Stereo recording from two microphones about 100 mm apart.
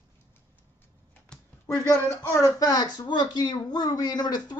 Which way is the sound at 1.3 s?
10° left (ahead or behind).